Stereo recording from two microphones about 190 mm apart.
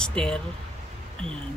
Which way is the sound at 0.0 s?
5° left (ahead or behind).